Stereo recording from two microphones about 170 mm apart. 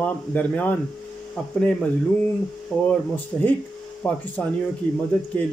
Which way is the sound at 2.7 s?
5° left (ahead or behind).